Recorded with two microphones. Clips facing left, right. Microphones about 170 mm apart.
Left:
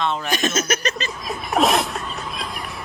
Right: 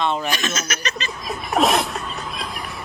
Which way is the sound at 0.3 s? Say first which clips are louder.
Left 4 dB; 50° left (ahead or behind).